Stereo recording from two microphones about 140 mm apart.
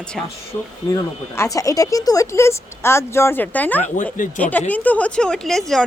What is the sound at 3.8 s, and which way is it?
Speech, 65° left (ahead or behind).